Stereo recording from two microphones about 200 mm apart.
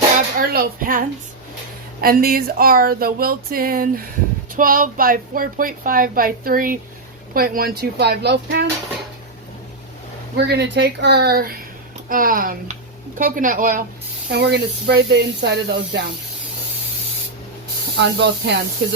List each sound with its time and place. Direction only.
0.3 s a woman's voice: 45° right (ahead or behind)
10.3 s a woman's voice: 55° right (ahead or behind)
14.3 s speech: 55° right (ahead or behind)
18.0 s speech: 60° right (ahead or behind)